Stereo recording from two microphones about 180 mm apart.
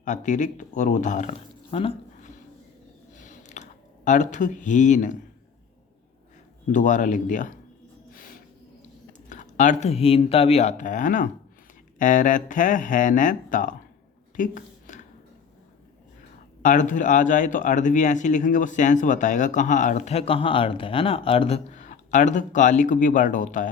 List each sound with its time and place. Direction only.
0.0 s speech: 45° left (ahead or behind)
3.2 s a sound: 40° left (ahead or behind)
6.7 s speech: 45° left (ahead or behind)
9.1 s speech: 45° left (ahead or behind)
14.3 s a sound: 45° left (ahead or behind)
16.6 s speech: 45° left (ahead or behind)